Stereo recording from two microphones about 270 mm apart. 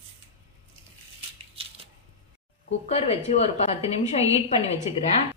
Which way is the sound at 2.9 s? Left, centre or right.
Left.